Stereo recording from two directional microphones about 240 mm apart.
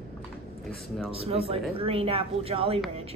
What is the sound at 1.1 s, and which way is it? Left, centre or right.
A woman's voice, right.